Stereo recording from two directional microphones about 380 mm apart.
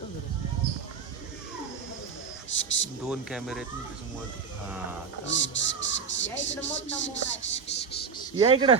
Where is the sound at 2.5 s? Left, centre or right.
Left.